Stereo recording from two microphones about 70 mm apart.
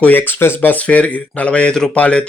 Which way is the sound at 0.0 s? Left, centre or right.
Left.